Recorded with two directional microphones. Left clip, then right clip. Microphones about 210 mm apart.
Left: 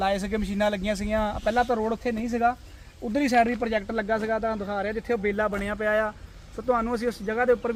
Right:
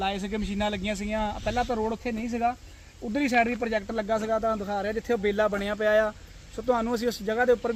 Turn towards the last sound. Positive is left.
turn(degrees=-50)  # may be behind; listen again after turning